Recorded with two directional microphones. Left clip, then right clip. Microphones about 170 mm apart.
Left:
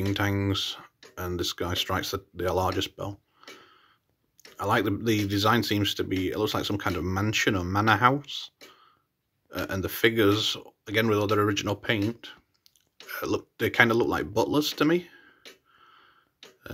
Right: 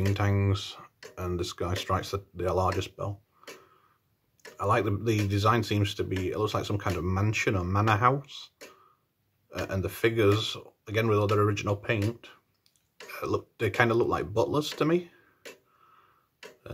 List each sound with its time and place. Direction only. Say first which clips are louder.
0.1 s speech: left 3 dB; 15° left (ahead or behind)
4.6 s speech: left 1 dB; 15° left (ahead or behind)
9.5 s speech: left 2 dB; 20° left (ahead or behind)